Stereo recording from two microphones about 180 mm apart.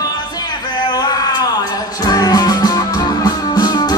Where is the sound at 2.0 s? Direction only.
20° left (ahead or behind).